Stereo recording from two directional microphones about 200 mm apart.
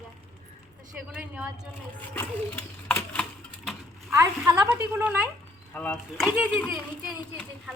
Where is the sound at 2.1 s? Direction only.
10° left (ahead or behind).